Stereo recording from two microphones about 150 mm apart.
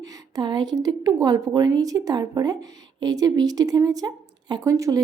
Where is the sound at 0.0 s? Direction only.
25° right (ahead or behind).